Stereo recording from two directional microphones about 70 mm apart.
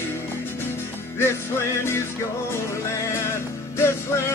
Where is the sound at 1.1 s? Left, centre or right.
Left.